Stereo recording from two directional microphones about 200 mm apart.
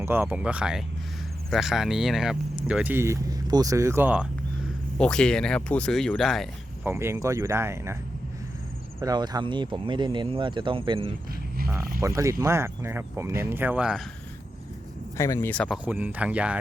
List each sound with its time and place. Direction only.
0.0 s speech: 10° right (ahead or behind)
4.9 s speech: 5° left (ahead or behind)
6.8 s speech: 10° right (ahead or behind)
9.0 s speech: 20° right (ahead or behind)
11.9 s speech: 15° right (ahead or behind)
15.2 s speech: 15° left (ahead or behind); by 16.6 s 5° right (ahead or behind)